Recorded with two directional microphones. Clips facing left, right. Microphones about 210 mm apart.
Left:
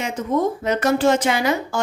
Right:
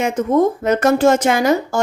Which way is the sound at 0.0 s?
50° right (ahead or behind).